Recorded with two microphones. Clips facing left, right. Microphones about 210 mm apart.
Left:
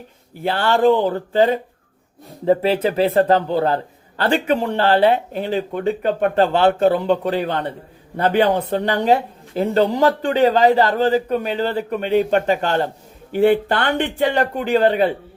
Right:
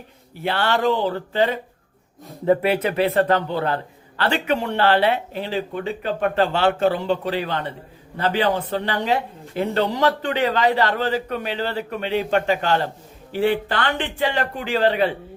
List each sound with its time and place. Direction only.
0.4 s a man's voice: 50° left (ahead or behind)
2.4 s a man's voice: 30° left (ahead or behind); by 9.1 s 45° left (ahead or behind)
9.6 s a man's voice: 35° left (ahead or behind); by 15.0 s 55° left (ahead or behind)